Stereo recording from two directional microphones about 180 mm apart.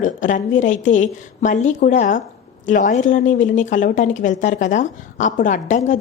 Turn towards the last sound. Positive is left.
turn(degrees=45)  # may be behind; listen again after turning